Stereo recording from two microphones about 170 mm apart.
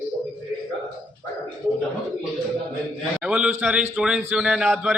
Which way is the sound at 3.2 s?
5° right (ahead or behind).